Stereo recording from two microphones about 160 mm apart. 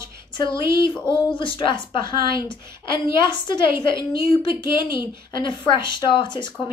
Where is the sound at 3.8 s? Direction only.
30° left (ahead or behind).